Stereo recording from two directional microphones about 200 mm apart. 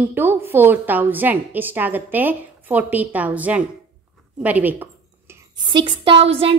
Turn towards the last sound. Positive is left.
turn(degrees=-30)  # may be behind; listen again after turning